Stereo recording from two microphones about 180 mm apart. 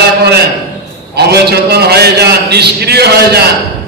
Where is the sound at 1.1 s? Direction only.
65° right (ahead or behind).